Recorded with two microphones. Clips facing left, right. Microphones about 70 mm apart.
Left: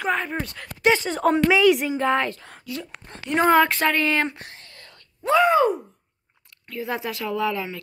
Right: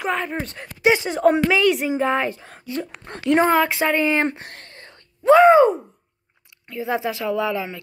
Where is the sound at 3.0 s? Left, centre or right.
Right.